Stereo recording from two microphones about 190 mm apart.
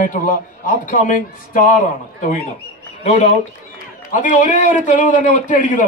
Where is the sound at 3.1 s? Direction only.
40° left (ahead or behind).